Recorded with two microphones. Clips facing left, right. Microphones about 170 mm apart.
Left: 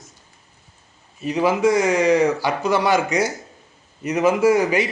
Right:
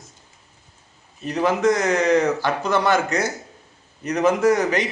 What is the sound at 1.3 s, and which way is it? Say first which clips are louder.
A man's voice: left 1 dB; 10° left (ahead or behind).